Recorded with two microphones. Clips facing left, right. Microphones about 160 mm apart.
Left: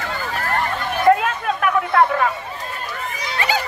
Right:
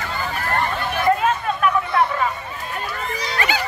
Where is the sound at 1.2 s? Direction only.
70° left (ahead or behind).